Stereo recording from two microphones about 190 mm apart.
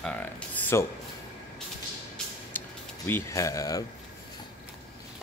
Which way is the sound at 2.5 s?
10° left (ahead or behind).